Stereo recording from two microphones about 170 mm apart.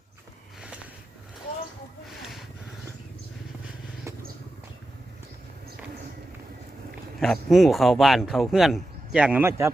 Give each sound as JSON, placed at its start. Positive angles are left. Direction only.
{"t": 4.1, "sound": "vehicle", "side_deg": -15}
{"t": 7.2, "sound": "speech", "side_deg": 0}